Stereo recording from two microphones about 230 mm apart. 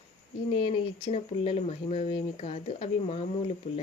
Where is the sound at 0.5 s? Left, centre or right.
Left.